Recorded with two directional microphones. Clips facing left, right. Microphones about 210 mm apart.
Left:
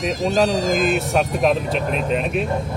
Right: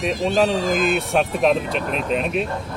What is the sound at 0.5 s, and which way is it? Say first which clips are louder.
Speech: left 1 dB; 40° left (ahead or behind).